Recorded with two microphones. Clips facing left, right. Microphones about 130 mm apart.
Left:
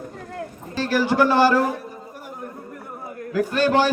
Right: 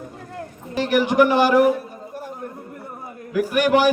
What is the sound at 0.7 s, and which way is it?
A man's voice, 15° right (ahead or behind).